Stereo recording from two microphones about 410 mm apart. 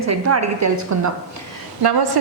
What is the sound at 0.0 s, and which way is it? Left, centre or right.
A woman's voice, right.